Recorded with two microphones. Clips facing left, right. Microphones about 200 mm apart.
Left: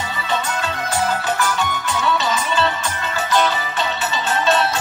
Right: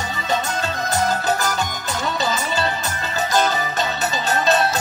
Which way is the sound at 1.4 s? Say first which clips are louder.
Left 2 dB; 40° right (ahead or behind).